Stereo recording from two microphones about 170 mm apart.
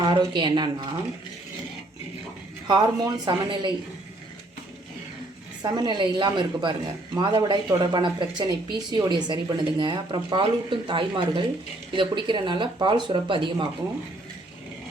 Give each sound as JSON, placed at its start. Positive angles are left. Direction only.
{"t": 0.0, "sound": "speech", "side_deg": -25}
{"t": 2.6, "sound": "speech", "side_deg": -25}
{"t": 5.6, "sound": "speech", "side_deg": -25}